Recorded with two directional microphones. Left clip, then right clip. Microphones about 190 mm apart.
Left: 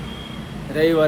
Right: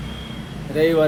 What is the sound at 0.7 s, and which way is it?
Speech, 15° left (ahead or behind).